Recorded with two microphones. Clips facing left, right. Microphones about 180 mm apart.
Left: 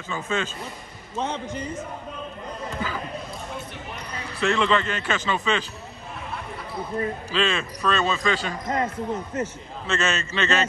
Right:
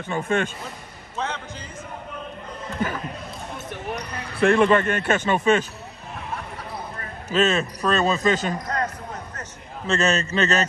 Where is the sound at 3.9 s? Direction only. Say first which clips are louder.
Right 4 dB; 50° right (ahead or behind).